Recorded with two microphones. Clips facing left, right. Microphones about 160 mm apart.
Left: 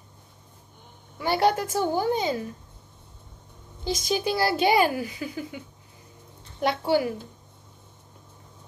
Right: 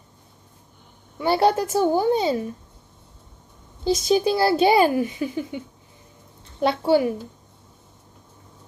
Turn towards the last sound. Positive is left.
turn(degrees=-25)  # may be behind; listen again after turning